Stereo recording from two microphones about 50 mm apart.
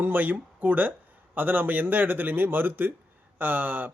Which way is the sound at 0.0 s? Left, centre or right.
Right.